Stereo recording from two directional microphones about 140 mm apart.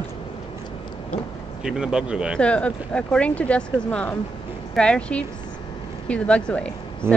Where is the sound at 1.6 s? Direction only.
5° right (ahead or behind).